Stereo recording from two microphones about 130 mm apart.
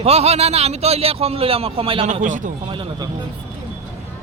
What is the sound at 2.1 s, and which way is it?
Speech, 85° right.